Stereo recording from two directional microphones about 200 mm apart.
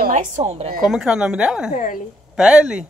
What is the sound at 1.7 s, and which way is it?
Speech, 40° left (ahead or behind).